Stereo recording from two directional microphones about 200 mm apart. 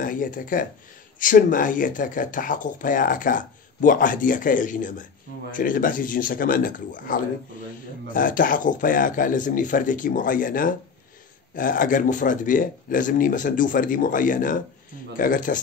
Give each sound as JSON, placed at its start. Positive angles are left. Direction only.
{"t": 0.0, "sound": "speech", "side_deg": 45}